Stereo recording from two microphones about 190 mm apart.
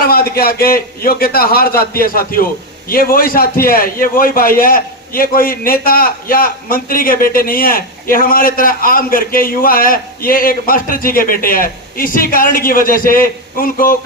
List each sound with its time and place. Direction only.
0.0 s a man's voice: 55° left (ahead or behind)